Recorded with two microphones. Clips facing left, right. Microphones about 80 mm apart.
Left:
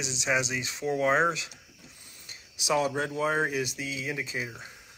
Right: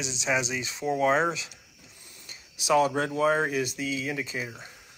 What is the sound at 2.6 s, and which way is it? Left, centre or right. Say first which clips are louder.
Speech: right 4 dB; centre.